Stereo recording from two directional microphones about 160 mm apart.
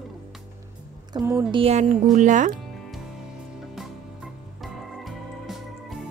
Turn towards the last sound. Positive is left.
turn(degrees=0)  # may be behind; listen again after turning